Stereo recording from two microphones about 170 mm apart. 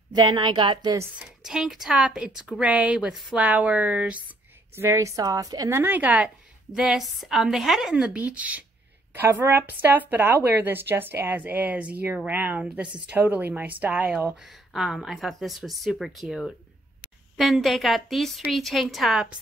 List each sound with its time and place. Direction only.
0.1 s a woman's voice: 25° right (ahead or behind)
1.4 s speech: centre (ahead or behind)